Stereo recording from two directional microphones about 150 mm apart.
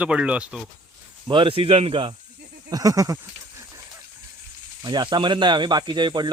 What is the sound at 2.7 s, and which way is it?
Speech, 25° right (ahead or behind).